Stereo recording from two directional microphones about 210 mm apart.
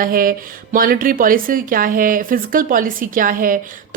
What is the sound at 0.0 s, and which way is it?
Speech, 40° right (ahead or behind).